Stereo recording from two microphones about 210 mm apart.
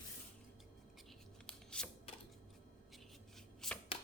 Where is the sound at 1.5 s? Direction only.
5° left (ahead or behind).